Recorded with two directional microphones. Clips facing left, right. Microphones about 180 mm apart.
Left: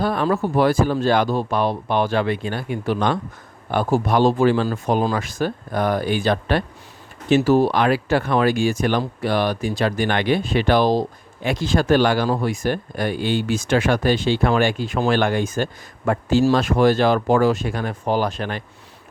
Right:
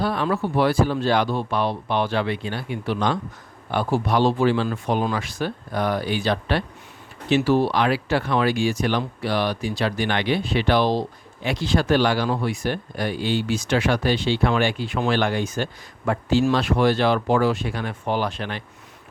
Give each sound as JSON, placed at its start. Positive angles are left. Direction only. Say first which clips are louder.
{"t": 0.0, "sound": "speech", "louder": "left 3 dB", "side_deg": 45}